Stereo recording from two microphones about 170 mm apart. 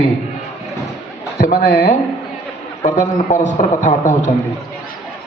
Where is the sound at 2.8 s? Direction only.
40° left (ahead or behind).